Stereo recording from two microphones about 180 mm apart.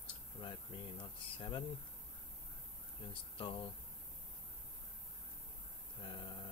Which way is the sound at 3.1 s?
30° left (ahead or behind).